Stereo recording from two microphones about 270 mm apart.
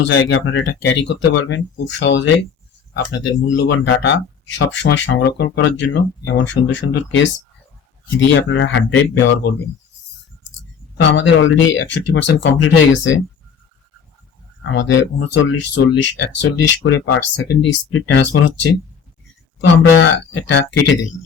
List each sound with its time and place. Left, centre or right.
0.0 s speech: left
11.0 s speech: left
14.6 s speech: left